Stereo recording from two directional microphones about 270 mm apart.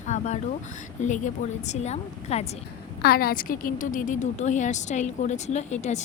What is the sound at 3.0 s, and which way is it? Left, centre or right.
A woman's voice, left.